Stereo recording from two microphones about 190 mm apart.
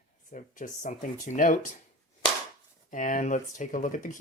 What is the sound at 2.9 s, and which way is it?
Speech, 45° left (ahead or behind).